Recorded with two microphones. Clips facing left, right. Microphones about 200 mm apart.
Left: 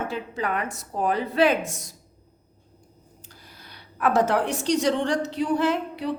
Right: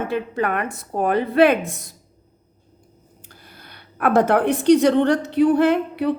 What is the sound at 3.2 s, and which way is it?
A woman's voice, 55° right (ahead or behind).